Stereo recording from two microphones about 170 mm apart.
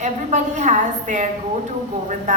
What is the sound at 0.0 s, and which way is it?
A woman's voice, 45° right (ahead or behind).